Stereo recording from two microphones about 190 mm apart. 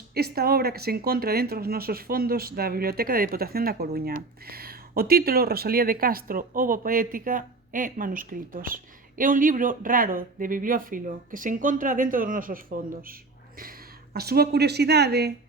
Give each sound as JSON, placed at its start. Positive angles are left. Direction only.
{"t": 0.1, "sound": "speech", "side_deg": -55}